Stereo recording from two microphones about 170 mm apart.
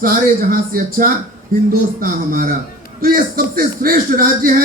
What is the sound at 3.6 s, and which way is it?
Speech, 55° right (ahead or behind).